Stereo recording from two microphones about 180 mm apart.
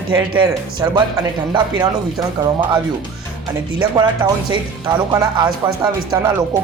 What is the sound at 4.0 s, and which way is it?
Speech, 25° right (ahead or behind).